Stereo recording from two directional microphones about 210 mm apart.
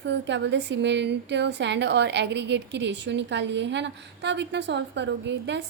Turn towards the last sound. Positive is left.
turn(degrees=-55)  # may be behind; listen again after turning